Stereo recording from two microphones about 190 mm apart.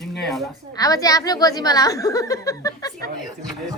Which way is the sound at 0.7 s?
20° left (ahead or behind).